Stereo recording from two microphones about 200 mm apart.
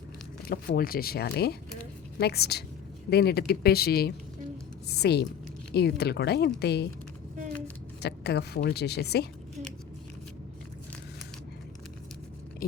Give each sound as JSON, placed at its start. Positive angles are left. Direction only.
{"t": 0.8, "sound": "a woman's voice", "side_deg": 50}
{"t": 8.0, "sound": "a woman's voice", "side_deg": 55}